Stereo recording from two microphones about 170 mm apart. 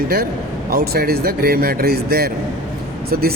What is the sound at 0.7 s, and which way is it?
A man's voice, 65° right (ahead or behind).